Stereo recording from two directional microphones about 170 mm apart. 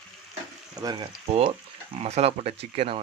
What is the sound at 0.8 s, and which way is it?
Speech, 25° right (ahead or behind).